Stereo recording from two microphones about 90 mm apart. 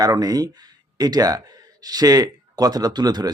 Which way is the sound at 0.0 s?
45° right (ahead or behind).